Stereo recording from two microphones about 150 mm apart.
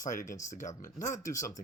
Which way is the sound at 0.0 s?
60° left (ahead or behind).